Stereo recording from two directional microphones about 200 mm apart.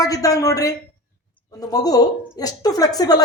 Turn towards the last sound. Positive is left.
turn(degrees=20)  # may be behind; listen again after turning